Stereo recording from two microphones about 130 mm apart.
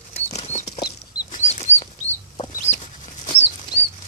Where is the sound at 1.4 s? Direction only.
60° left (ahead or behind).